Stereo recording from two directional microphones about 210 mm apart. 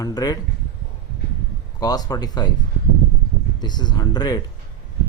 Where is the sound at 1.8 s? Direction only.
20° left (ahead or behind).